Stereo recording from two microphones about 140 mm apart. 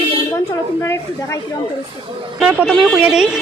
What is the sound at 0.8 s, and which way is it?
Speech, 20° left (ahead or behind).